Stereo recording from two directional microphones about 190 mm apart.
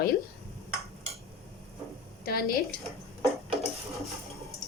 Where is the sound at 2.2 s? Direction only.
50° left (ahead or behind).